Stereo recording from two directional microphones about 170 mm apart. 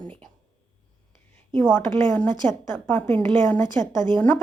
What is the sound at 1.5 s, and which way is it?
A woman's voice, 5° left (ahead or behind).